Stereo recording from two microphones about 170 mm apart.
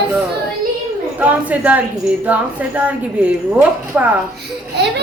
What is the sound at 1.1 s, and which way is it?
A woman's voice, 10° right (ahead or behind).